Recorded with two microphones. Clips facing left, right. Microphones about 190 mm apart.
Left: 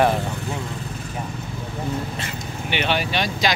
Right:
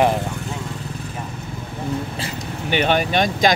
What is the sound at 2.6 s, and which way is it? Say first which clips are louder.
Speech: right 5 dB; 45° right (ahead or behind).